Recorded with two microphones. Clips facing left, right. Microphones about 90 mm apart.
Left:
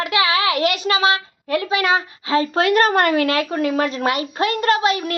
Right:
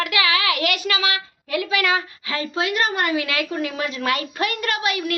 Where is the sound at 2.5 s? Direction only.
45° left (ahead or behind).